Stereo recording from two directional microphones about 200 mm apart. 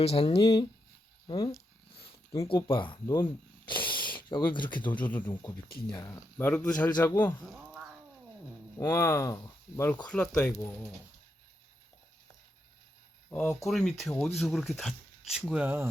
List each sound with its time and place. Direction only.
0.0 s speech: 30° left (ahead or behind)
3.7 s hiss: 25° left (ahead or behind)
4.3 s speech: 20° left (ahead or behind)
4.9 s speech: 10° left (ahead or behind)
7.5 s cat: 5° right (ahead or behind)
8.8 s speech: 15° left (ahead or behind)
13.3 s speech: 10° left (ahead or behind); by 15.9 s 10° right (ahead or behind)